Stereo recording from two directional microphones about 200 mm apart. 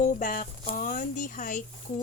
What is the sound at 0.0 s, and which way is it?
A woman's voice, 40° left (ahead or behind).